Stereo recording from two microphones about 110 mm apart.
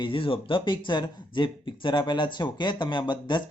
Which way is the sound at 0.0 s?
55° left (ahead or behind).